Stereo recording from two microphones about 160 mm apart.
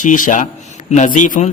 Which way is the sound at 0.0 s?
55° left (ahead or behind).